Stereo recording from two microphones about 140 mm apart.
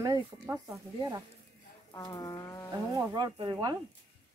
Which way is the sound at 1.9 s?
25° left (ahead or behind).